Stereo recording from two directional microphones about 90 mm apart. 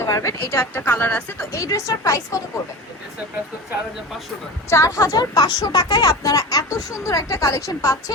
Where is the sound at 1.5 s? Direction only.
40° left (ahead or behind).